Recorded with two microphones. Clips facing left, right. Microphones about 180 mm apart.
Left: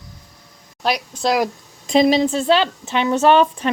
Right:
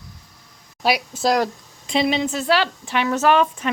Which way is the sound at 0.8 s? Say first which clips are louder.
Even; 5° right (ahead or behind).